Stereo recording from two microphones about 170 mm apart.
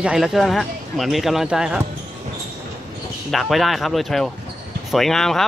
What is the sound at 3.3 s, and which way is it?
Speech, centre (ahead or behind).